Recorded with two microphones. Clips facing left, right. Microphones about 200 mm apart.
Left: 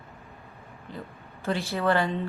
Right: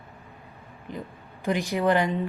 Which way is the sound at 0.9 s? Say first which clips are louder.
Right 4 dB; 15° right (ahead or behind).